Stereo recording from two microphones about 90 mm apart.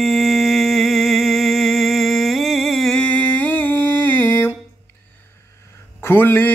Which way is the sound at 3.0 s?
15° left (ahead or behind).